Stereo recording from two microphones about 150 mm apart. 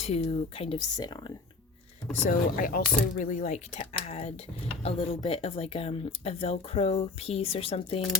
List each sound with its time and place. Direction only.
0.0 s speech: 45° left (ahead or behind)
0.8 s speech: 25° left (ahead or behind)
2.6 s speech: 65° left (ahead or behind); by 8.0 s 40° left (ahead or behind)